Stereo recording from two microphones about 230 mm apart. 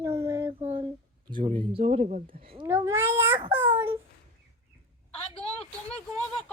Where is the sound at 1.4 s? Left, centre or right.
Right.